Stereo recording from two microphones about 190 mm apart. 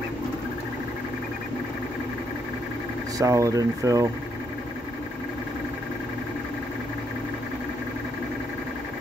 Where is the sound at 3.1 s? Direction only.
15° right (ahead or behind).